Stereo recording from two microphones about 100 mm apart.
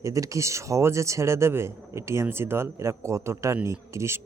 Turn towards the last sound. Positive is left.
turn(degrees=-30)  # may be behind; listen again after turning